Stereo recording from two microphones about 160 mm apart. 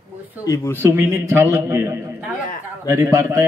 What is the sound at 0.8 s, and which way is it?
A man's voice, 15° right (ahead or behind).